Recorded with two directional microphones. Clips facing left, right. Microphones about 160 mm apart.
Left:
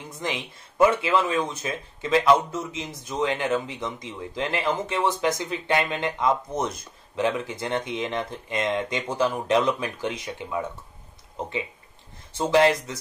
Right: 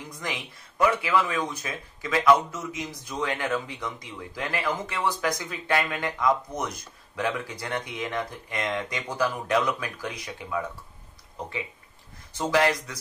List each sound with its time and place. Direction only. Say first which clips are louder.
0.2 s speech: left 5 dB; 25° left (ahead or behind)
12.4 s speech: left 4 dB; 25° left (ahead or behind)